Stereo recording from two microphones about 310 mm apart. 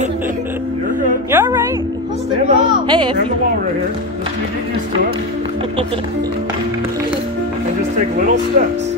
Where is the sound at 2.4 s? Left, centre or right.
Right.